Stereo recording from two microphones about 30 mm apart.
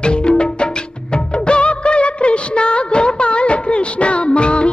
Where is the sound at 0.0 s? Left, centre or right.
Left.